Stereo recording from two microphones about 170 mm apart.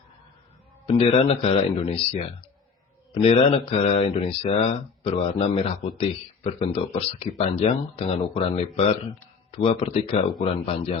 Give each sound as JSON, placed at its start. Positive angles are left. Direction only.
{"t": 0.9, "sound": "speech", "side_deg": 35}